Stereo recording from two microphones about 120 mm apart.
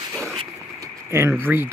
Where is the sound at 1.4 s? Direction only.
15° right (ahead or behind).